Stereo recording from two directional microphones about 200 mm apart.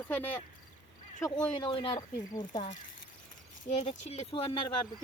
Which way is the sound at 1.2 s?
20° left (ahead or behind).